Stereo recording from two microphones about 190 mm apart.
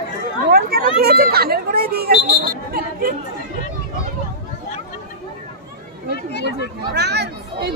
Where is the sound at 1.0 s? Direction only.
55° right (ahead or behind).